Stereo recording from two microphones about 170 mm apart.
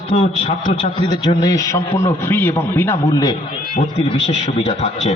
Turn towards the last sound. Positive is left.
turn(degrees=40)  # may be behind; listen again after turning